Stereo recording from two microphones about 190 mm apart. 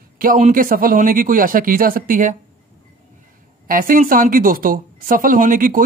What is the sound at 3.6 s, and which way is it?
A woman's voice, 45° right (ahead or behind).